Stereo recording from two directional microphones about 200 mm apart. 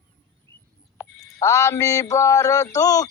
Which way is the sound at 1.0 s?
5° right (ahead or behind).